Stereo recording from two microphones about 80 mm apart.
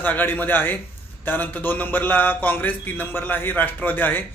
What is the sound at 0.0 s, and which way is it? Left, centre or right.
A man's voice, left.